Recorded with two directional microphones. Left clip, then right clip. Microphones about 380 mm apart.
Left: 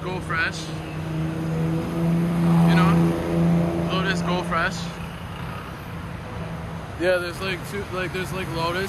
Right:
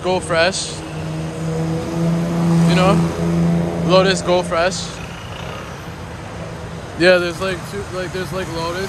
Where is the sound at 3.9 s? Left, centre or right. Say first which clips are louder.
Right 16 dB; centre.